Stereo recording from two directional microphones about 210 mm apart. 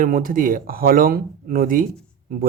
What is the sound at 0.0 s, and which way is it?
Speech, 40° right (ahead or behind).